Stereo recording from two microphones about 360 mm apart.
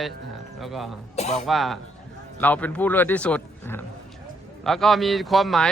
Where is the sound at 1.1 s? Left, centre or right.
Centre.